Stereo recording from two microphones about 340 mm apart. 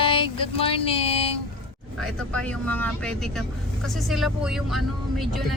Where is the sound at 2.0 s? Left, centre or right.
Centre.